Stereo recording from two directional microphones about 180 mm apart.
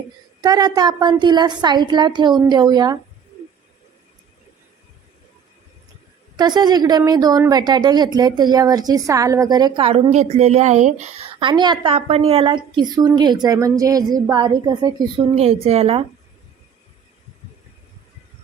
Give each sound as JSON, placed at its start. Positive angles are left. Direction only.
{"t": 0.4, "sound": "a woman's voice", "side_deg": -20}
{"t": 6.3, "sound": "a woman's voice", "side_deg": -25}
{"t": 11.3, "sound": "a woman's voice", "side_deg": -25}